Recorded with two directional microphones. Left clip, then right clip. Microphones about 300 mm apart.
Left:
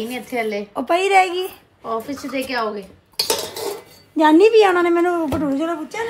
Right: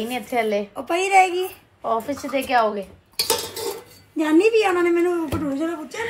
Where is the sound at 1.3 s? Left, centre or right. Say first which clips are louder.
Left 1 dB; centre.